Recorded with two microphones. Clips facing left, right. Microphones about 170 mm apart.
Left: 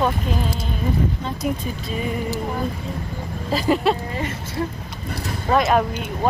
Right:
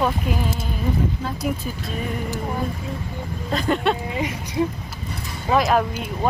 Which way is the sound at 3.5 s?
5° left (ahead or behind).